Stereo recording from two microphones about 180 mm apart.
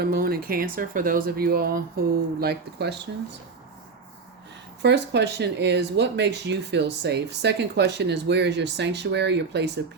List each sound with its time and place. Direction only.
0.0 s speech: 55° right (ahead or behind)
4.8 s speech: 70° right (ahead or behind)